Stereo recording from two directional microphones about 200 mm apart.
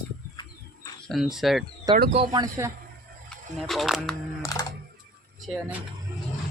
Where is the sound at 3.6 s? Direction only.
Centre (ahead or behind).